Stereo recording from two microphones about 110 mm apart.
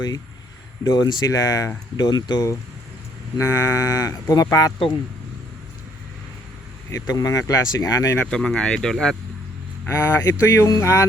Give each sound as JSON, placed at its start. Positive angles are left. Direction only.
{"t": 0.9, "sound": "speech", "side_deg": 40}
{"t": 6.9, "sound": "speech", "side_deg": 35}
{"t": 8.2, "sound": "speech", "side_deg": 5}
{"t": 9.9, "sound": "speech", "side_deg": 25}